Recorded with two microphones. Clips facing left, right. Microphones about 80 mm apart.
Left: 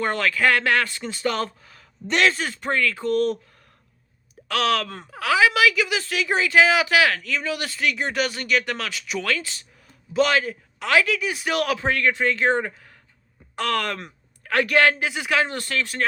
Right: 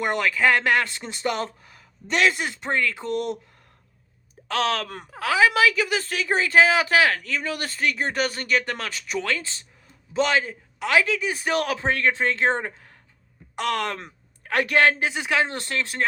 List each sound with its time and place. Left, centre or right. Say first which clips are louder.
0.0 s a woman's voice: even; centre
2.0 s a man's voice: left 1 dB; centre
2.3 s a woman's voice: left 1 dB; centre
4.4 s a woman's voice: left 2 dB; right